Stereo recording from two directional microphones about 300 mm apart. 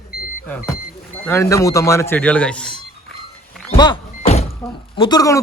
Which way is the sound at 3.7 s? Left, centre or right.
Centre.